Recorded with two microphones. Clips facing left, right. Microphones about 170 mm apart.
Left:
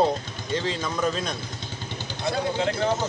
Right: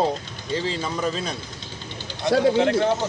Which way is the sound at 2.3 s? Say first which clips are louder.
Right 8 dB; 70° right (ahead or behind).